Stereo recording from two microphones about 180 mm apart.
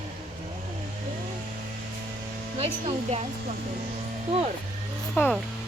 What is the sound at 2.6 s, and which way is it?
Speech, 30° right (ahead or behind).